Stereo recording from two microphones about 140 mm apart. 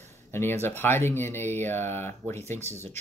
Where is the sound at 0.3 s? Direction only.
15° left (ahead or behind).